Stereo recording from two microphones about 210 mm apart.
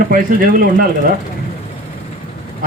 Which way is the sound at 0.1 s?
45° right (ahead or behind).